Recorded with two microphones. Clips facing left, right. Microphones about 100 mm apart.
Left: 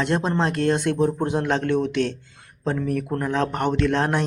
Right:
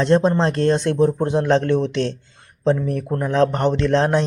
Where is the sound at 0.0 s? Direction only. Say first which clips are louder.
Right 6 dB; 30° right (ahead or behind).